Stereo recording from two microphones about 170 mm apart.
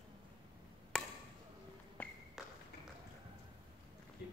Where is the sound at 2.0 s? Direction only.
10° left (ahead or behind).